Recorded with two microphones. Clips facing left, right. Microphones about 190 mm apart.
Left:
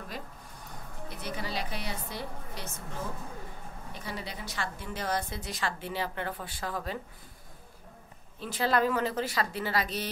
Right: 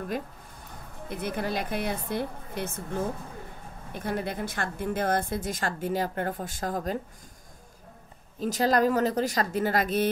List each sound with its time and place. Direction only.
1.0 s a woman's voice: 55° right (ahead or behind)
3.9 s a woman's voice: 55° right (ahead or behind)
8.4 s a woman's voice: 40° right (ahead or behind)